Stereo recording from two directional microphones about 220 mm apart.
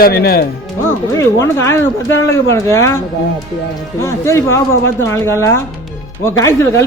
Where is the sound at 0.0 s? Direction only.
45° left (ahead or behind).